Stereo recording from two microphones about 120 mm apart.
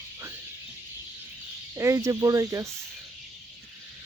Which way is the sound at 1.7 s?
25° right (ahead or behind).